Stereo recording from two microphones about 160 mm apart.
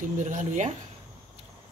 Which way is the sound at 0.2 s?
50° right (ahead or behind).